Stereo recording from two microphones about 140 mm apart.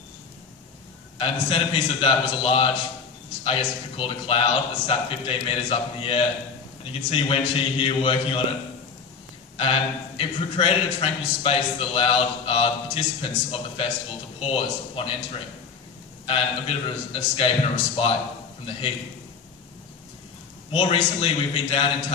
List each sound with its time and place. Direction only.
1.1 s a man's voice: 40° left (ahead or behind)
9.6 s a man's voice: 40° left (ahead or behind)
16.3 s a man's voice: 40° left (ahead or behind)
20.7 s a man's voice: 40° left (ahead or behind)